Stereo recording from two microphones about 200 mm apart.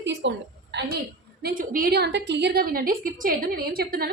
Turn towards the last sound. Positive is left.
turn(degrees=-50)  # may be behind; listen again after turning